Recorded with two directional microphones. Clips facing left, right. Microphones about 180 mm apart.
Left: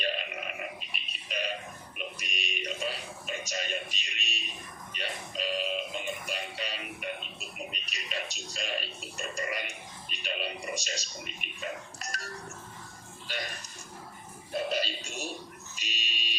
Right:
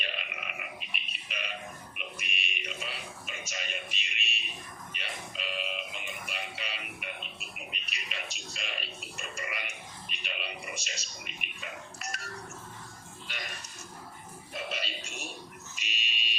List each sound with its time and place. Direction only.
0.0 s burping: 35° left (ahead or behind)
2.0 s a sound: 40° left (ahead or behind)
4.9 s music: 40° left (ahead or behind)
13.2 s speech: 40° left (ahead or behind)
14.5 s speech: 35° left (ahead or behind)
15.7 s fire alarm: 40° left (ahead or behind)